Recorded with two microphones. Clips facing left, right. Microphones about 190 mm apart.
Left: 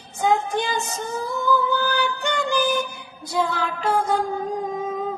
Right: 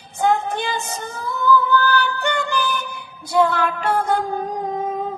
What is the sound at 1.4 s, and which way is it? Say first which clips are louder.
Female singing: right 5 dB; 60° right (ahead or behind).